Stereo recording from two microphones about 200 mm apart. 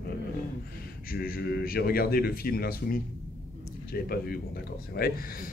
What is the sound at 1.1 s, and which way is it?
Speech, 50° left (ahead or behind).